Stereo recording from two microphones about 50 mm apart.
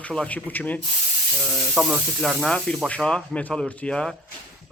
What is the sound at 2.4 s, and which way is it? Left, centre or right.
Speech, centre.